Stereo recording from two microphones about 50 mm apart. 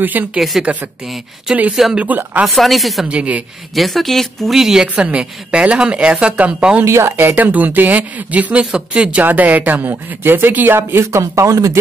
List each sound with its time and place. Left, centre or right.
0.0 s speech: right
0.4 s speech: centre
1.7 s speech: centre
2.0 s speech: right
2.4 s speech: centre
3.1 s a woman's voice: right
3.7 s speech: centre
4.6 s speech: centre
4.9 s a woman's voice: right
6.8 s speech: right
7.2 s a woman's voice: right
9.2 s speech: right
9.8 s speech: right
11.1 s speech: right